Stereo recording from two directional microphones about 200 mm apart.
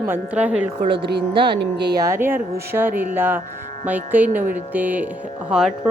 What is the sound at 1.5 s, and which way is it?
Speech, 55° right (ahead or behind).